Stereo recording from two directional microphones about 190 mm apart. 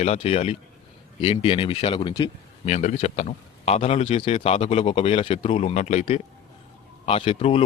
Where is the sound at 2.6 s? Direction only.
35° left (ahead or behind).